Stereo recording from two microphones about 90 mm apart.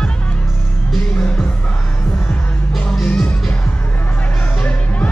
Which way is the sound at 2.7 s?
Centre (ahead or behind).